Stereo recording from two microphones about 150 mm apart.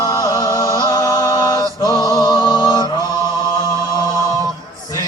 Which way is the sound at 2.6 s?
30° left (ahead or behind).